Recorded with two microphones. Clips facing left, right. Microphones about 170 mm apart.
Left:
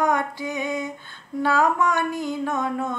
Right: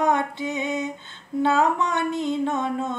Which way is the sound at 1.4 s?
25° right (ahead or behind).